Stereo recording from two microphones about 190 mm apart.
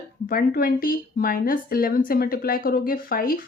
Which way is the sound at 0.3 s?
50° left (ahead or behind).